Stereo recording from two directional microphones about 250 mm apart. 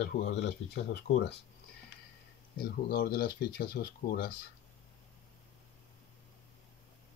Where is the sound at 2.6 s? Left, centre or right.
Left.